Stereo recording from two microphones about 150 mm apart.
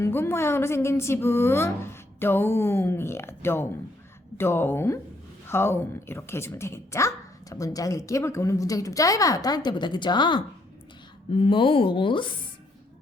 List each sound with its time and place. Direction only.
0.0 s a woman's voice: 15° left (ahead or behind); by 12.3 s 35° left (ahead or behind)